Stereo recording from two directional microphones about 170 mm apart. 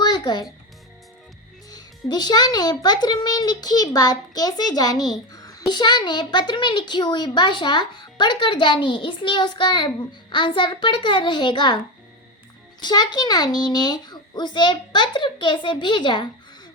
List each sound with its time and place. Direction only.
0.0 s music: 25° left (ahead or behind)
1.7 s a child's voice: 25° left (ahead or behind)
12.8 s a child's voice: 25° left (ahead or behind)